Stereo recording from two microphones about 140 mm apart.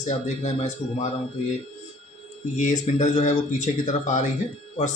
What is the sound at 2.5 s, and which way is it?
A man's voice, 65° left (ahead or behind).